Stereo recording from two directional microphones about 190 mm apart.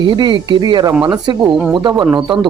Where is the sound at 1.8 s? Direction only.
25° right (ahead or behind).